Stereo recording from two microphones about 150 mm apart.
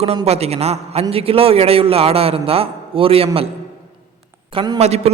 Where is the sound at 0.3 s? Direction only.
45° right (ahead or behind).